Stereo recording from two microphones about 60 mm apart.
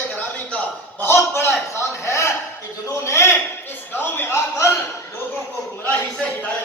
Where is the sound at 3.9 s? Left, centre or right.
Left.